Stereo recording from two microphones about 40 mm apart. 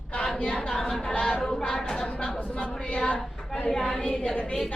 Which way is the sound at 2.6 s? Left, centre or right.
Left.